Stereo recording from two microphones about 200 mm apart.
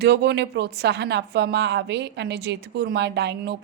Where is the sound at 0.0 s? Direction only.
55° right (ahead or behind).